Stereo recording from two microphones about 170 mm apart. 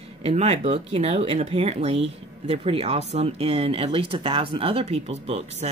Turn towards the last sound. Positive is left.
turn(degrees=-35)  # may be behind; listen again after turning